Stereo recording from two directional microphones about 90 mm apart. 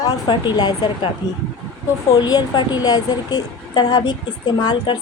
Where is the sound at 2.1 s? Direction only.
45° left (ahead or behind).